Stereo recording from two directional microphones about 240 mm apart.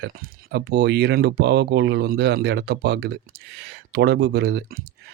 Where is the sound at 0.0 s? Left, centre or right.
Right.